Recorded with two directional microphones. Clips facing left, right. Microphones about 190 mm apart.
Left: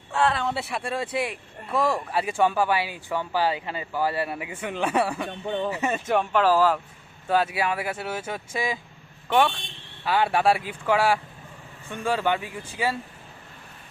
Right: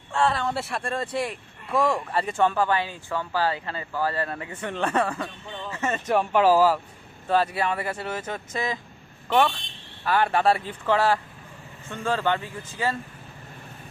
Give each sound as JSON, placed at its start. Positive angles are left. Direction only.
{"t": 0.1, "sound": "speech", "side_deg": 0}
{"t": 5.3, "sound": "speech", "side_deg": 60}
{"t": 5.7, "sound": "speech", "side_deg": 15}
{"t": 6.1, "sound": "speech", "side_deg": -5}
{"t": 7.3, "sound": "speech", "side_deg": 5}
{"t": 10.1, "sound": "speech", "side_deg": 10}